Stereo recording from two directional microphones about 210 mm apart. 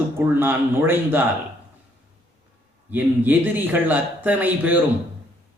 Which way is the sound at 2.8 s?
10° right (ahead or behind).